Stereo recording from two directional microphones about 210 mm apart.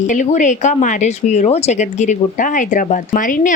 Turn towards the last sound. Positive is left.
turn(degrees=40)  # may be behind; listen again after turning